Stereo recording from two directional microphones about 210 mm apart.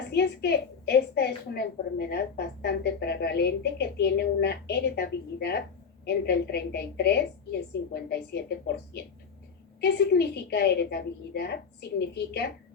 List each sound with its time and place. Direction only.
0.1 s a woman's voice: 50° left (ahead or behind)